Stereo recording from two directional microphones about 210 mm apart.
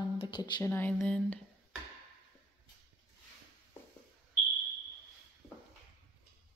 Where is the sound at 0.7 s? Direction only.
10° left (ahead or behind).